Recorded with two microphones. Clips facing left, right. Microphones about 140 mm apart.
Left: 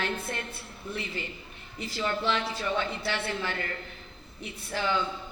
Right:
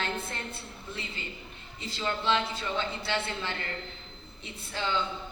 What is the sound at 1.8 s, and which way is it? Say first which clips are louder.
A man's voice: left 1 dB; 25° right (ahead or behind).